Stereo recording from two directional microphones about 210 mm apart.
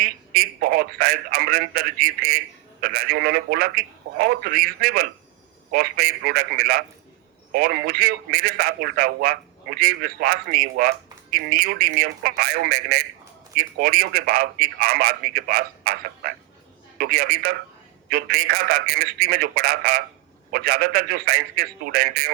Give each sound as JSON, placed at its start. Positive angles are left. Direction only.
{"t": 0.0, "sound": "a man's voice", "side_deg": -50}